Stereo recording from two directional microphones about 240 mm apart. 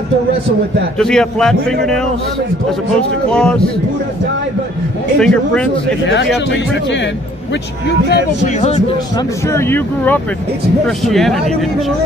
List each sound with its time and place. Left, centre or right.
0.9 s a man's voice: centre
3.3 s a man's voice: centre
5.2 s a man's voice: centre
6.0 s speech: left
8.5 s a man's voice: left
9.5 s a man's voice: centre